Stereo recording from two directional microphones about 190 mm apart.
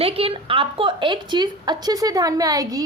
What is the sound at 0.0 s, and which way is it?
A woman's voice, 30° right (ahead or behind).